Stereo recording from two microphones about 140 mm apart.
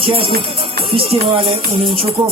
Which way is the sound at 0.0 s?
40° right (ahead or behind).